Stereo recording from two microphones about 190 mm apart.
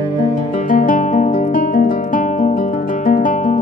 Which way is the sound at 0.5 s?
45° left (ahead or behind).